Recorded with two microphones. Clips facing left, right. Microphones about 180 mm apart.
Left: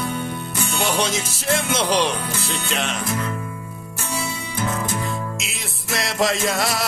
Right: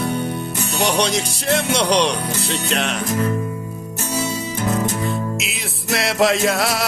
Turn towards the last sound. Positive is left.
turn(degrees=0)  # may be behind; listen again after turning